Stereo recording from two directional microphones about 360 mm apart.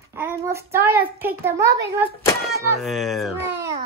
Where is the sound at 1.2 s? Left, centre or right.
Centre.